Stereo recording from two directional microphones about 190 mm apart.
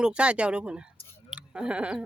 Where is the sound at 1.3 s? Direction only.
5° right (ahead or behind).